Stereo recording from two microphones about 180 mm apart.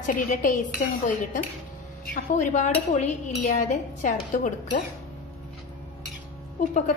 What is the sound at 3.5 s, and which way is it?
Dishes, 45° left (ahead or behind).